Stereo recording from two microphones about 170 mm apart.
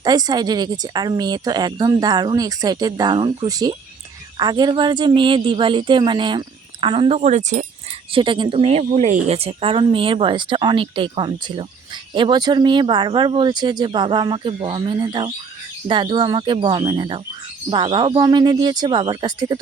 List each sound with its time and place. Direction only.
0.0 s a woman's voice: 25° right (ahead or behind); by 7.6 s 45° right (ahead or behind)
8.1 s speech: 30° right (ahead or behind)
8.8 s a woman's voice: 45° right (ahead or behind); by 19.5 s 25° right (ahead or behind)